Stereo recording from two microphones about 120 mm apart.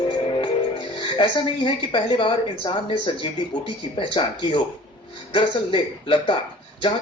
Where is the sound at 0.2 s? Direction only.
45° left (ahead or behind).